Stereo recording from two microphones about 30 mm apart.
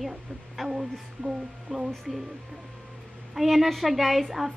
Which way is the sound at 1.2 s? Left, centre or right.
Centre.